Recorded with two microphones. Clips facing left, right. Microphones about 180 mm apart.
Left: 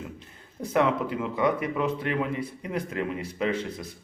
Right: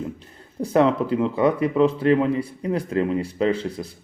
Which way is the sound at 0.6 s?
30° right (ahead or behind).